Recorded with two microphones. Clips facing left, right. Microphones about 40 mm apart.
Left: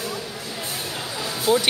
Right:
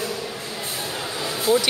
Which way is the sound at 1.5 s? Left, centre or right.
Left.